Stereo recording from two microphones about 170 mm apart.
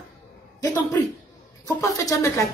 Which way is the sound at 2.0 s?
20° left (ahead or behind).